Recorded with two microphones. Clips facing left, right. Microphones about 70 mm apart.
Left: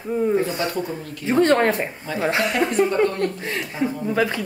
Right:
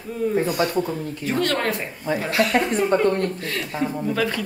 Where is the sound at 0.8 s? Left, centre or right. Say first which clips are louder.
Left 1 dB; left.